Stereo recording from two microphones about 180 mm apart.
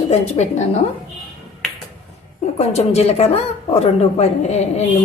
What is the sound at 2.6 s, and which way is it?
A woman's voice, 35° left (ahead or behind).